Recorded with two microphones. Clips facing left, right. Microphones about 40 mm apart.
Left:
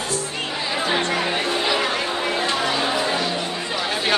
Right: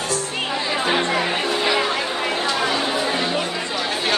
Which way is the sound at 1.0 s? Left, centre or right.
Right.